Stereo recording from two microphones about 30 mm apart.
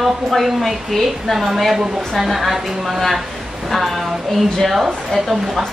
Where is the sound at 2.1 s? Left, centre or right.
Centre.